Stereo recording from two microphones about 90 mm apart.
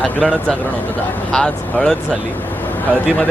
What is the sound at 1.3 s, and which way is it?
Speech, 10° left (ahead or behind).